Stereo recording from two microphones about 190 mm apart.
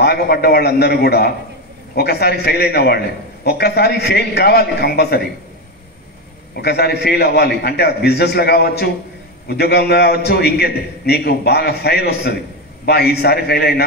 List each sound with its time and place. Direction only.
0.0 s a man's voice: 55° left (ahead or behind)
6.5 s a man's voice: 55° left (ahead or behind)